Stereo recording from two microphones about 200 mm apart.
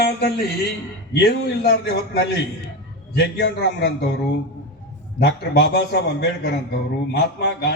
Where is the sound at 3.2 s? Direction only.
55° left (ahead or behind).